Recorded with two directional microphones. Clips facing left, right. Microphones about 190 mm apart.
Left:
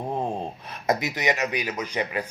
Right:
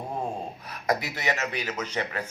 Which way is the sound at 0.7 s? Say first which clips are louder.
Left 2 dB; 20° left (ahead or behind).